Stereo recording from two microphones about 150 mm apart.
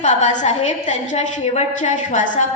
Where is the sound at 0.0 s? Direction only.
50° left (ahead or behind).